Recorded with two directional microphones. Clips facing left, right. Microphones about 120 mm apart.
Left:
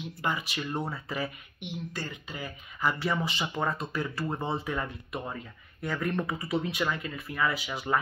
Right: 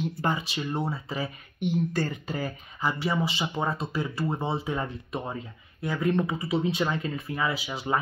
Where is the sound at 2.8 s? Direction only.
15° right (ahead or behind).